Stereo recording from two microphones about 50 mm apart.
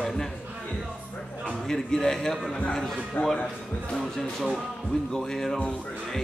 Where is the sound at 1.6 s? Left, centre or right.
Centre.